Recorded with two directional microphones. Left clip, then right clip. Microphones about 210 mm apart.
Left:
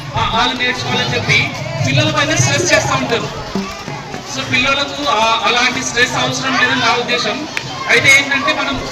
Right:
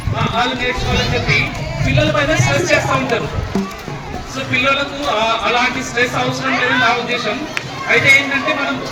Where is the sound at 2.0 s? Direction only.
45° right (ahead or behind).